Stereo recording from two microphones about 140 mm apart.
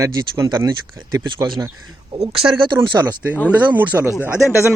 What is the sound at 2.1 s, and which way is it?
Speech, 45° right (ahead or behind).